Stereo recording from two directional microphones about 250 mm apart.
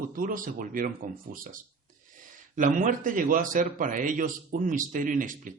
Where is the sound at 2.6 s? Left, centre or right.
Right.